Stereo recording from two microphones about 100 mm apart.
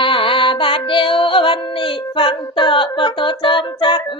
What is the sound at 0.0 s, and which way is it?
Music, 60° left (ahead or behind).